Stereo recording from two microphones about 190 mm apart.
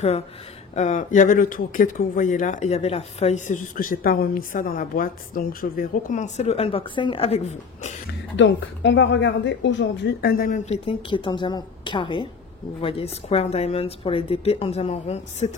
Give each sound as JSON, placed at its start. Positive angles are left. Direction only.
{"t": 0.7, "sound": "speech", "side_deg": 40}
{"t": 8.4, "sound": "a woman's voice", "side_deg": 70}
{"t": 10.3, "sound": "a woman's voice", "side_deg": 45}